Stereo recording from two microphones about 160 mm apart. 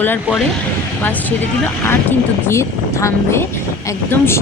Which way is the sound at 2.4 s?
15° left (ahead or behind).